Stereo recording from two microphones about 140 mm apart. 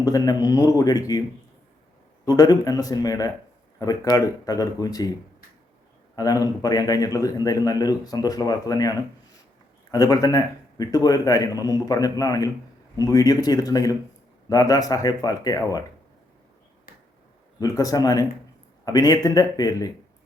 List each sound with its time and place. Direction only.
0.0 s a man's voice: 25° left (ahead or behind)
2.2 s a man's voice: 30° left (ahead or behind)
6.1 s a man's voice: 25° left (ahead or behind)
17.6 s a man's voice: 25° left (ahead or behind)